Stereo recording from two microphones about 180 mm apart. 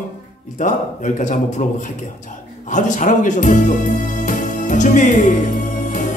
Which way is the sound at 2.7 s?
45° left (ahead or behind).